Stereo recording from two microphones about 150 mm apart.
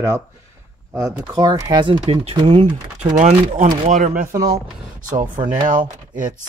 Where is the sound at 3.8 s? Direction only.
60° right (ahead or behind).